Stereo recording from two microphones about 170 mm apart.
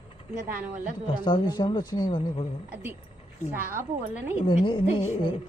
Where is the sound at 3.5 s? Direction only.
15° right (ahead or behind).